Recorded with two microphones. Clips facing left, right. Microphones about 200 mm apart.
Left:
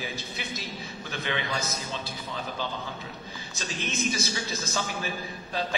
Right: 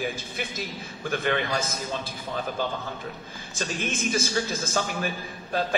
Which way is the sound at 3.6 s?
50° right (ahead or behind).